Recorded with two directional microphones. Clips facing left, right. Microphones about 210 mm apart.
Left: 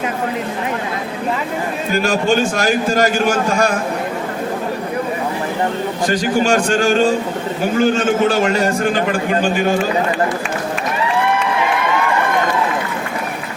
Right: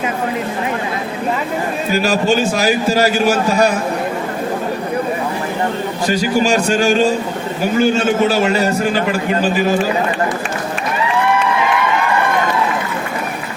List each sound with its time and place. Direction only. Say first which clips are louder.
1.9 s a man's voice: right 1 dB; 5° right (ahead or behind)
6.1 s a man's voice: right 1 dB; 10° right (ahead or behind)